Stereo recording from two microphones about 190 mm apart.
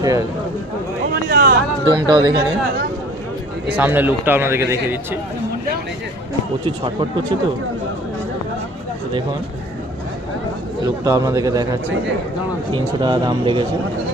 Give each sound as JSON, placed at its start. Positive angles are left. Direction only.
{"t": 0.0, "sound": "speech", "side_deg": -20}
{"t": 1.3, "sound": "a sound", "side_deg": -50}
{"t": 1.9, "sound": "speech", "side_deg": -20}
{"t": 3.8, "sound": "speech", "side_deg": -10}
{"t": 6.7, "sound": "speech", "side_deg": -25}
{"t": 10.8, "sound": "speech", "side_deg": -20}